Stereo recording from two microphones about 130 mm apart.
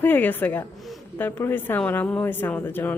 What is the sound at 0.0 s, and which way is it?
A woman's voice, 15° left (ahead or behind).